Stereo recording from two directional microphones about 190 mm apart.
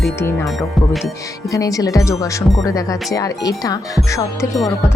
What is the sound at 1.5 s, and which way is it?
Speech, 20° left (ahead or behind).